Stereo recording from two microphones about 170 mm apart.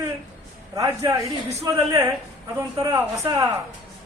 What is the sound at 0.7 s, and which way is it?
A man's voice, 20° right (ahead or behind).